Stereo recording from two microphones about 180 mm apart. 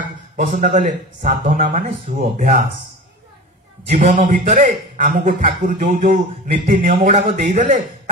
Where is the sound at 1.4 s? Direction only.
50° right (ahead or behind).